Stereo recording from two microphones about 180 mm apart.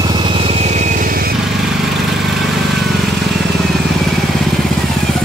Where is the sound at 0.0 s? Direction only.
25° right (ahead or behind); by 1.3 s 55° right (ahead or behind).